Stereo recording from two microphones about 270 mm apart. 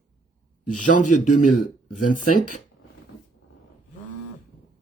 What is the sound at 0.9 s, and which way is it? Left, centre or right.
Speech, left.